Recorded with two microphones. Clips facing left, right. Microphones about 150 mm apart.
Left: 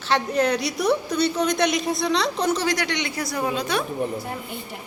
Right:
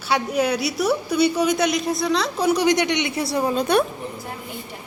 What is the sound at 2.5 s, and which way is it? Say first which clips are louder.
A man's voice: right 5 dB; 15° right (ahead or behind).